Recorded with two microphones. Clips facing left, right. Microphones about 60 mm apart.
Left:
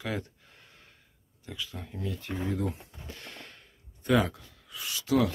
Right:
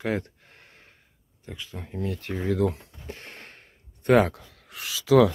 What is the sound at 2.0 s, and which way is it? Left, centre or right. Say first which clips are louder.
Speech: right 5 dB; right.